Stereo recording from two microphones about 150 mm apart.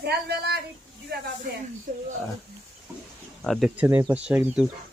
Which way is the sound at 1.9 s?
55° right (ahead or behind).